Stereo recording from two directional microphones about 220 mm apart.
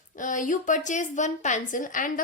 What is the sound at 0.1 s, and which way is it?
A woman's voice, 35° left (ahead or behind).